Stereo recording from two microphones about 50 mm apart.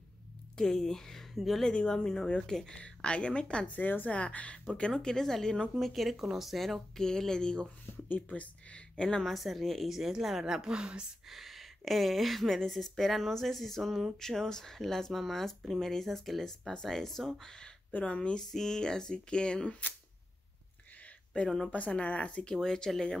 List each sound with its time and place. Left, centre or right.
0.6 s speech: centre
1.3 s speech: centre
1.7 s speech: centre
2.8 s speech: left
3.7 s a woman's voice: left; by 5.7 s centre
5.8 s speech: centre
8.1 s speech: left
9.2 s a woman's voice: centre
11.2 s speech: centre
17.9 s speech: left
18.5 s speech: centre
21.6 s speech: left